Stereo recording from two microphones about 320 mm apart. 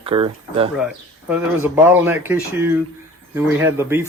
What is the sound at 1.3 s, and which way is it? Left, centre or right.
Speech, centre.